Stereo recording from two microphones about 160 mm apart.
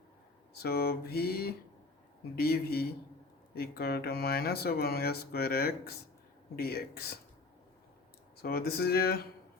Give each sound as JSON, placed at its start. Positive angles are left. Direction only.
{"t": 0.6, "sound": "speech", "side_deg": 75}
{"t": 8.4, "sound": "speech", "side_deg": 75}